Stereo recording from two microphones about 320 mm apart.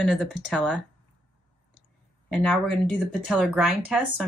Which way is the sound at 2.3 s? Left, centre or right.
Centre.